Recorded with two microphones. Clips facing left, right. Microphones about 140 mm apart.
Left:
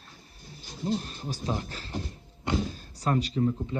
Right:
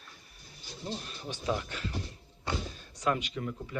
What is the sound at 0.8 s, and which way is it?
Speech, 35° left (ahead or behind).